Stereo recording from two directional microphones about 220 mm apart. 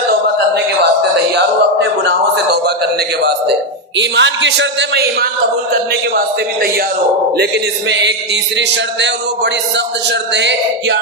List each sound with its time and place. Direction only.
1.4 s a sound: 50° right (ahead or behind)
3.9 s music: 55° right (ahead or behind)
7.9 s music: 50° right (ahead or behind)